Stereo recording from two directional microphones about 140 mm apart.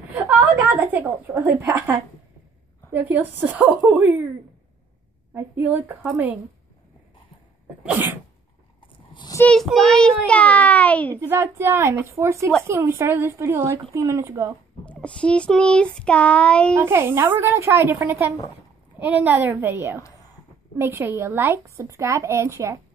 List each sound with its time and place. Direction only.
0.1 s a sound: 10° right (ahead or behind)
1.2 s a woman's voice: 20° right (ahead or behind)
5.3 s a woman's voice: 15° right (ahead or behind)
7.8 s a woman's voice: 10° right (ahead or behind)
8.8 s a sound: 35° left (ahead or behind)
9.5 s child singing: 5° left (ahead or behind)
11.1 s a woman's voice: 20° right (ahead or behind)
14.9 s child singing: 10° left (ahead or behind)
16.7 s a woman's voice: 15° right (ahead or behind)